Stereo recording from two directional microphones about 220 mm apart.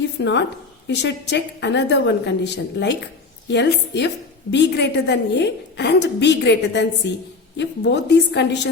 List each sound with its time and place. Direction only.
0.2 s a woman's voice: 50° left (ahead or behind)